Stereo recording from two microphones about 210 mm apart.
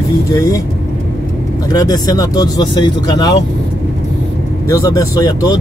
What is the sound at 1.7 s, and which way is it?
Speech, 20° left (ahead or behind).